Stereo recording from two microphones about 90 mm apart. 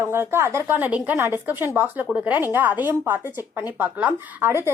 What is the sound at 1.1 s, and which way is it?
A woman's voice, 30° right (ahead or behind).